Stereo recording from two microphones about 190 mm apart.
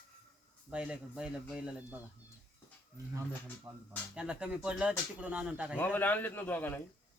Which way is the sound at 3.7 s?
25° right (ahead or behind).